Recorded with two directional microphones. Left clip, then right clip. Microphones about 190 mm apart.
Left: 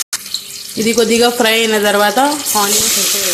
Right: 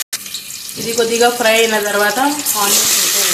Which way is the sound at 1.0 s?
50° left (ahead or behind).